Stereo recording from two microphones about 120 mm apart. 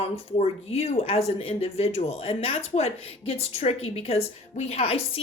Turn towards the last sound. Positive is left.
turn(degrees=55)  # may be behind; listen again after turning